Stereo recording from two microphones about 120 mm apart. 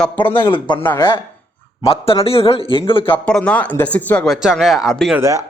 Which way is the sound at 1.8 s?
50° left (ahead or behind).